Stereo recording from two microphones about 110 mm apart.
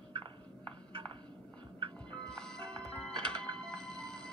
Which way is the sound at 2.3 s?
5° left (ahead or behind).